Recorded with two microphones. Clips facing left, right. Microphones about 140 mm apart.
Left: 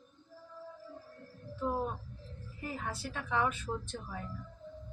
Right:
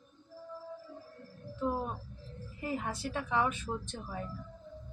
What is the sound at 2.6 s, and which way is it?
Speech, 20° right (ahead or behind).